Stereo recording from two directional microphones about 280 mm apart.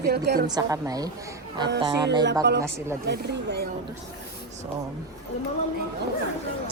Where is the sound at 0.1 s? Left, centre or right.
Right.